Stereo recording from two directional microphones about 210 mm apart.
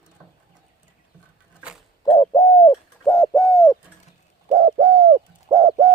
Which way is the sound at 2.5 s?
25° left (ahead or behind).